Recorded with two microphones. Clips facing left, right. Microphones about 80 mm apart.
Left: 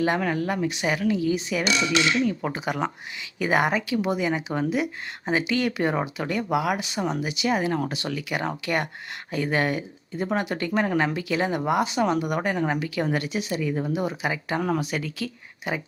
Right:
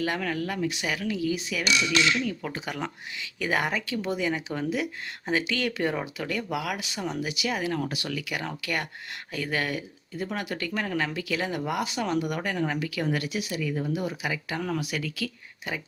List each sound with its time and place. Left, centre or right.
0.0 s speech: left
2.2 s speech: left